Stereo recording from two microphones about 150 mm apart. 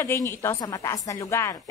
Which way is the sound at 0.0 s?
15° left (ahead or behind).